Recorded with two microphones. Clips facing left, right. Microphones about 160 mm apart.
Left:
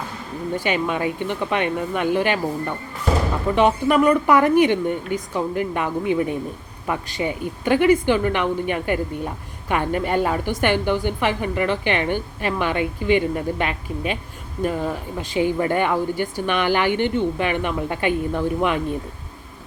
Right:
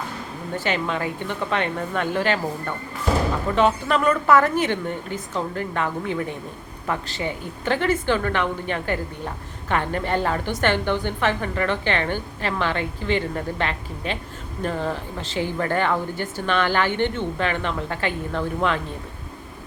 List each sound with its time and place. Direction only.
0.5 s a woman's voice: 15° left (ahead or behind)
3.5 s a woman's voice: 15° left (ahead or behind)